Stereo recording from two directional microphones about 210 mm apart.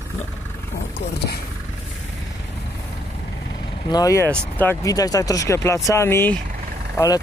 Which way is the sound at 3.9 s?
15° left (ahead or behind).